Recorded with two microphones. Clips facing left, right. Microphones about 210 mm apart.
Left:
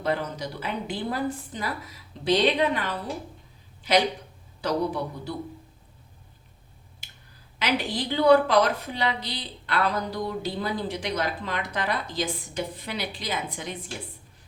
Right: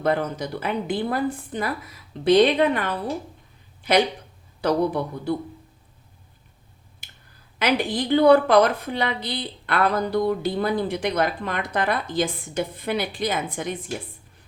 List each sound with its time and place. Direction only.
0.0 s a woman's voice: 55° right (ahead or behind)
4.6 s a woman's voice: 55° right (ahead or behind)
7.6 s a woman's voice: 55° right (ahead or behind)